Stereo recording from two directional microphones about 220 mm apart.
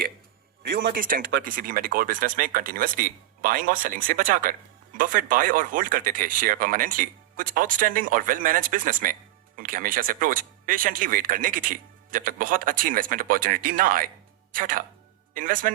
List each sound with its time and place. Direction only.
0.6 s speech: 45° right (ahead or behind)